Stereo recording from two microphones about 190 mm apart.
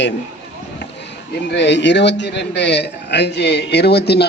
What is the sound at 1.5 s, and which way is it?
A man's voice, 65° left (ahead or behind).